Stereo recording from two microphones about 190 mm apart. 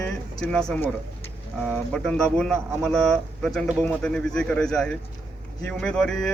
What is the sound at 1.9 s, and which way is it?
A man's voice, 5° left (ahead or behind).